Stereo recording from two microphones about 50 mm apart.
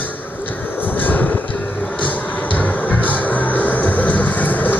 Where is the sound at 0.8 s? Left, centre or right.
Left.